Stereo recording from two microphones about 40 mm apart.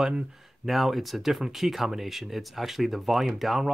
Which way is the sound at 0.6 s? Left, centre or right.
Centre.